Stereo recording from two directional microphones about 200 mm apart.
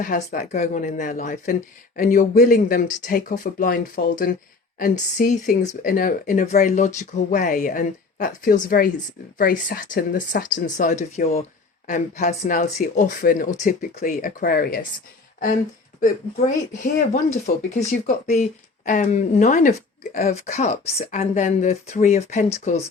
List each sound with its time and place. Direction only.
0.0 s speech: 45° left (ahead or behind)
16.0 s speech: 40° left (ahead or behind)